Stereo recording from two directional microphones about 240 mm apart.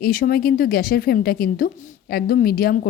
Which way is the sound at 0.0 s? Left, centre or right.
Left.